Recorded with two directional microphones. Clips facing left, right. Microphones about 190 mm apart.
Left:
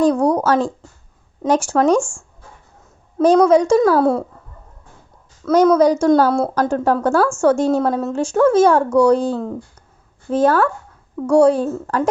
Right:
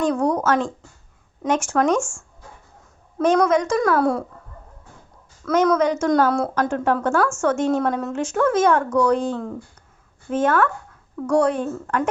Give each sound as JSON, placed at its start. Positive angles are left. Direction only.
{"t": 0.0, "sound": "a woman's voice", "side_deg": 35}
{"t": 5.5, "sound": "a woman's voice", "side_deg": 35}